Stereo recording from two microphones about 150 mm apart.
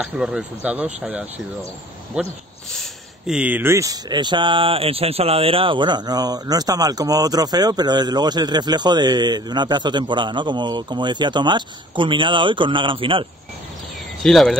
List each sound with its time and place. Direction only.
0.0 s speech: 5° right (ahead or behind); by 13.3 s 35° right (ahead or behind)
14.2 s speech: centre (ahead or behind)